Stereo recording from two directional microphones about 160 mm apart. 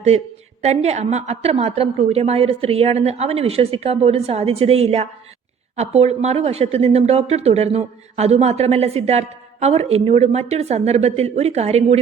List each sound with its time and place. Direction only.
0.6 s speech: 40° right (ahead or behind)